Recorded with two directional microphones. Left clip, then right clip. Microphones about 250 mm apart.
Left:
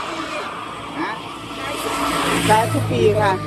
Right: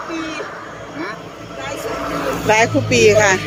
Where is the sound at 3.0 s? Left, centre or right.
Centre.